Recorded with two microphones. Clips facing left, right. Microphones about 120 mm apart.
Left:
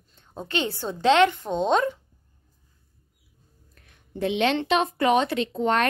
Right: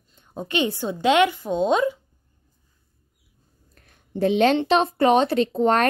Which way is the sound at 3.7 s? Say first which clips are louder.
Right 3 dB; 40° right (ahead or behind).